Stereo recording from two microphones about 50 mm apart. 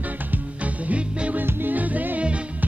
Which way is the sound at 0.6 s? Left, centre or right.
Right.